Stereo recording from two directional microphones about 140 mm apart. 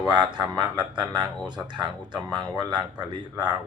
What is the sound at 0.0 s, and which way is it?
Speech, 30° right (ahead or behind).